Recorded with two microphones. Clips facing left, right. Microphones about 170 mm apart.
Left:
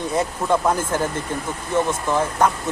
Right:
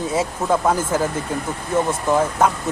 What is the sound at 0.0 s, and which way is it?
Speech, 5° right (ahead or behind).